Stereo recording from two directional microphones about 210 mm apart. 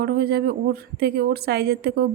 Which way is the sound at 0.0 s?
50° right (ahead or behind).